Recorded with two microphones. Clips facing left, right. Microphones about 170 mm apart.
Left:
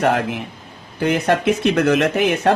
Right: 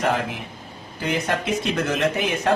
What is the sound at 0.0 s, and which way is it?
Speech, 65° left (ahead or behind).